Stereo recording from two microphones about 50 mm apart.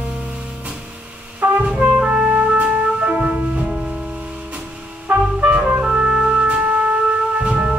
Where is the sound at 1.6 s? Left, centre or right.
Right.